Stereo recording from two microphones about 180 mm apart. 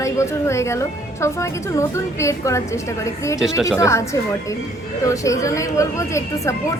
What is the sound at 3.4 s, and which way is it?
Speech, centre (ahead or behind).